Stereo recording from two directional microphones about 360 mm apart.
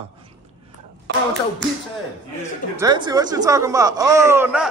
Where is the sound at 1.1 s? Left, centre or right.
Right.